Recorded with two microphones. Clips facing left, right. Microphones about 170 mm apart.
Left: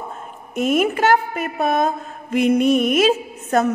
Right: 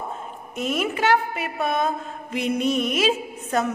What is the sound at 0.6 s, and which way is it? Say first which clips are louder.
A woman's voice: left 7 dB; 50° left (ahead or behind).